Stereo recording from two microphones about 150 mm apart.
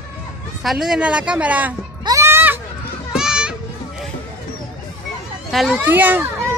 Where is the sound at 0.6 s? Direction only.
Centre (ahead or behind).